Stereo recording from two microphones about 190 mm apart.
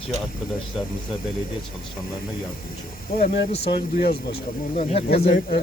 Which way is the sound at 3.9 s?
55° left (ahead or behind).